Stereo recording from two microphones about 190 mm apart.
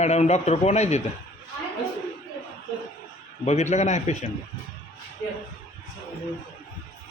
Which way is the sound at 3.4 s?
35° left (ahead or behind).